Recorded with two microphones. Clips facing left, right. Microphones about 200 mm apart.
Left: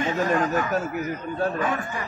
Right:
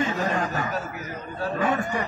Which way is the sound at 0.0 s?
45° left (ahead or behind).